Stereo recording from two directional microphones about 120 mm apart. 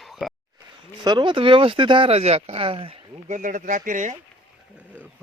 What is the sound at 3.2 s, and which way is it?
Speech, 90° right.